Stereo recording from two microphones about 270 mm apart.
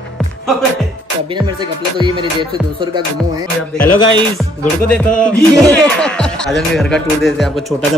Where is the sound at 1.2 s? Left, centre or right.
Centre.